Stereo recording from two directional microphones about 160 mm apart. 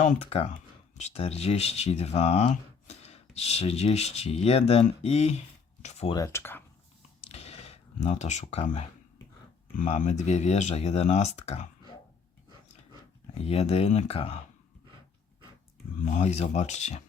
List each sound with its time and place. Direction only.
0.0 s speech: 40° left (ahead or behind)
5.8 s a sound: 45° left (ahead or behind)
6.1 s speech: 20° left (ahead or behind)
7.2 s a sound: 40° left (ahead or behind)
10.0 s speech: 45° left (ahead or behind)
13.4 s speech: 40° left (ahead or behind)
16.0 s speech: 50° left (ahead or behind)